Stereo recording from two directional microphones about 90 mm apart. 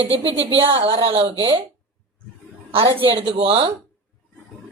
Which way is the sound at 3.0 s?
75° right (ahead or behind).